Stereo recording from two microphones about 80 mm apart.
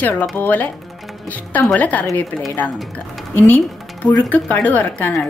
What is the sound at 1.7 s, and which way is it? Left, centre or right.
A woman's voice, centre.